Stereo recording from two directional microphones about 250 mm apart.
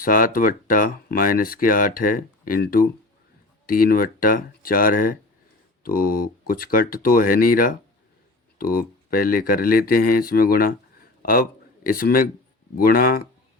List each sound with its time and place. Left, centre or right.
0.0 s a man's voice: left